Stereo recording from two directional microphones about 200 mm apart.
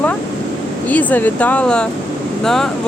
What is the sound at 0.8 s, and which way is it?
Speech, 10° left (ahead or behind).